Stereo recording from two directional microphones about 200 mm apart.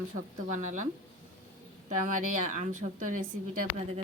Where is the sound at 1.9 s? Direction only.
40° right (ahead or behind).